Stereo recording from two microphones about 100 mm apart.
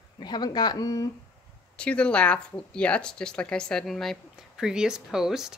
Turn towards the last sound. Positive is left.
turn(degrees=-5)  # may be behind; listen again after turning